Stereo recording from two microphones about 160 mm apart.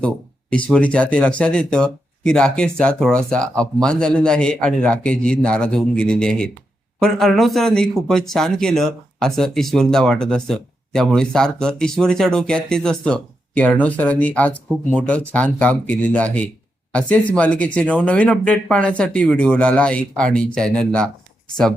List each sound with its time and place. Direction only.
0.5 s speech: 10° left (ahead or behind)